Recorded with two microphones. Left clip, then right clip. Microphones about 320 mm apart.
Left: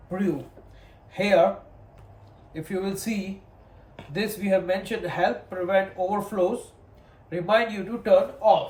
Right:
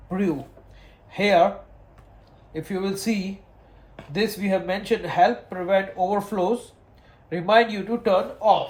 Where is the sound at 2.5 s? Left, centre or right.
Centre.